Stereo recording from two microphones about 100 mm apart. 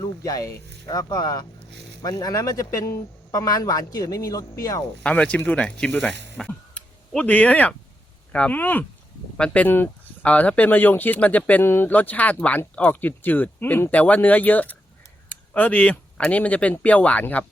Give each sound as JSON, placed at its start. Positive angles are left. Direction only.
{"t": 0.0, "sound": "a man's voice", "side_deg": 35}
{"t": 5.0, "sound": "speech", "side_deg": 10}